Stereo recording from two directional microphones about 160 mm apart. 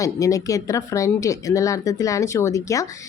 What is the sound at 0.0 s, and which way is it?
A woman's voice, 20° left (ahead or behind).